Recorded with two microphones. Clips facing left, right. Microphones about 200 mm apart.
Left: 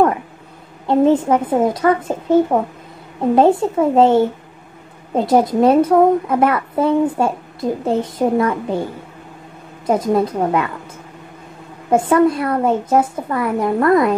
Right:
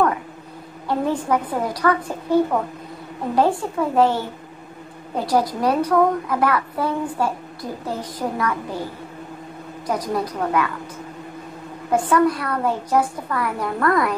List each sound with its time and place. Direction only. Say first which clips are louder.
0.8 s a woman's voice: left 8 dB; 25° left (ahead or behind)
9.8 s a woman's voice: left 8 dB; 25° left (ahead or behind)
11.9 s a woman's voice: left 4 dB; 25° left (ahead or behind)